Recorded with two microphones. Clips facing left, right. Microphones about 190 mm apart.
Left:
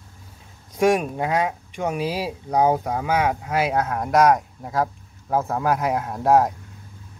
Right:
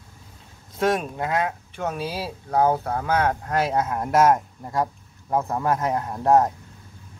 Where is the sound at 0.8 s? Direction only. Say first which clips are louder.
Left 4 dB; 10° left (ahead or behind).